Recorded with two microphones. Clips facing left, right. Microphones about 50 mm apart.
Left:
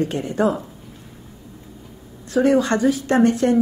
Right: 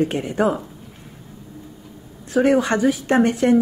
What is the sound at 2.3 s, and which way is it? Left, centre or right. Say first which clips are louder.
Speech: even; right.